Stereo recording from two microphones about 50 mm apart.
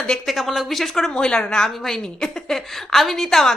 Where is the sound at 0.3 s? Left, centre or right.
Centre.